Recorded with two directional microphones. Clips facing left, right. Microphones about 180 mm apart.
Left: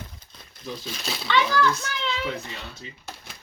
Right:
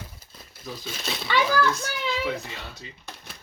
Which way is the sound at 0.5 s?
Centre (ahead or behind).